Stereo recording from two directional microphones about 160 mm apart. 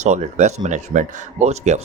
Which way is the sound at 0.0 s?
45° right (ahead or behind).